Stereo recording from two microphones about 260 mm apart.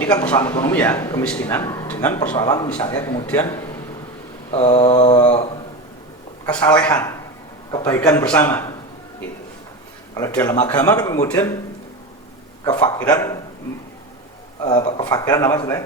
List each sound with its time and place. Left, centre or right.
0.0 s a man's voice: centre
4.5 s mantra: left
6.7 s a man's voice: centre
10.2 s a man's voice: centre
13.1 s a man's voice: centre
14.6 s a man's voice: centre